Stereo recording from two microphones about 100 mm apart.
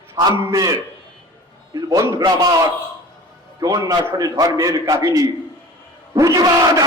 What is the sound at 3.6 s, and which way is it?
A man's voice, 40° right (ahead or behind).